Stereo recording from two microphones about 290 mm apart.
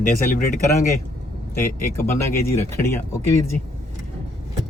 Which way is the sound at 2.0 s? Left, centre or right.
Centre.